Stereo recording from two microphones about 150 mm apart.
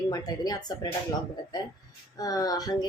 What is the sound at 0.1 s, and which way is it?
Speech, 25° left (ahead or behind).